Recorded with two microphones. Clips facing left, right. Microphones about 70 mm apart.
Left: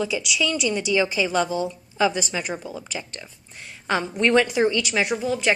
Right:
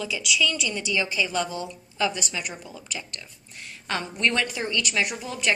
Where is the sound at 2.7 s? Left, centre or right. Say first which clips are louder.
Left 5 dB; centre.